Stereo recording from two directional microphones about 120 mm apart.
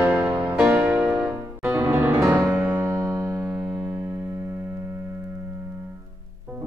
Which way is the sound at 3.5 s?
5° right (ahead or behind).